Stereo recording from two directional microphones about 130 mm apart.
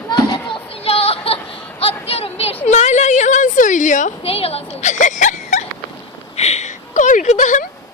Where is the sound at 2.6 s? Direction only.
60° left (ahead or behind).